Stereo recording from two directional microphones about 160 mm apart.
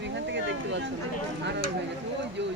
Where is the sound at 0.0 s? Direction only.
90° right.